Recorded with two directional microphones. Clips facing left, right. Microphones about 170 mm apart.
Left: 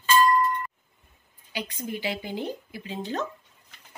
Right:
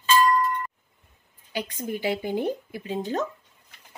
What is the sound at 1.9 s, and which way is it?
Speech, 45° right (ahead or behind).